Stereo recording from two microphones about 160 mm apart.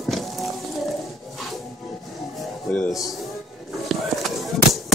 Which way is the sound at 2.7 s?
5° left (ahead or behind).